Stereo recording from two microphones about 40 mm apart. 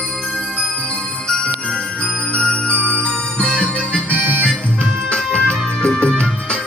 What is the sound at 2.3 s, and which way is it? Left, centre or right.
Music, left.